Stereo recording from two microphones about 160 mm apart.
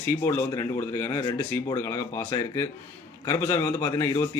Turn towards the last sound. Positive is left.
turn(degrees=20)  # may be behind; listen again after turning